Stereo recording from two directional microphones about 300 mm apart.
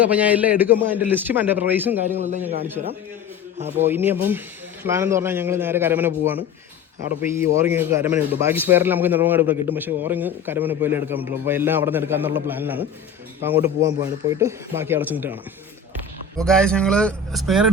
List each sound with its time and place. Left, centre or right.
0.0 s a man's voice: centre
2.1 s a man's voice: right
3.8 s a man's voice: centre
16.4 s a man's voice: centre